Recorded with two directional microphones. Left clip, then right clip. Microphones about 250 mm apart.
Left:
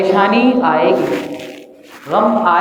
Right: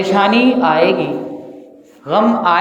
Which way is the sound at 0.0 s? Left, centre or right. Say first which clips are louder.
Left 1 dB; right.